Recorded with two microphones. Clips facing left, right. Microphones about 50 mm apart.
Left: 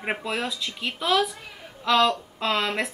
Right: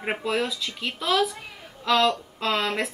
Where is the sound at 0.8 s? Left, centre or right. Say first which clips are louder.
Even; centre.